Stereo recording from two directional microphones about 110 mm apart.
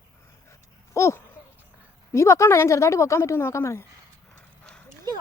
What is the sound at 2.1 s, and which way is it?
A woman's voice, 25° left (ahead or behind).